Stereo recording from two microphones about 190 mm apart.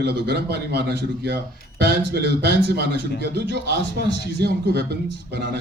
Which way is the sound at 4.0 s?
60° right (ahead or behind).